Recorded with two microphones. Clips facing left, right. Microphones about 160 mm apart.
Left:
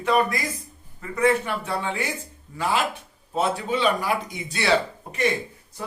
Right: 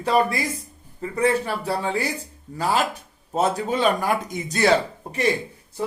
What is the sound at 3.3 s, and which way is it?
Speech, 40° right (ahead or behind).